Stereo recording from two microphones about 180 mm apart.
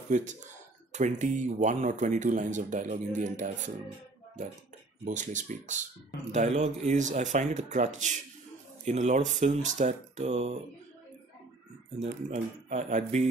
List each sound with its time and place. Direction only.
0.1 s speech: 45° right (ahead or behind)
5.0 s speech: 45° right (ahead or behind)
12.3 s speech: 40° right (ahead or behind)